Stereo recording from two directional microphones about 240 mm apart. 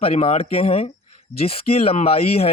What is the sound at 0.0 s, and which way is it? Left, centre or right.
A man's voice, left.